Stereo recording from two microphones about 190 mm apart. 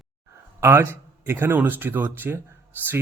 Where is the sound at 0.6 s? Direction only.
15° right (ahead or behind).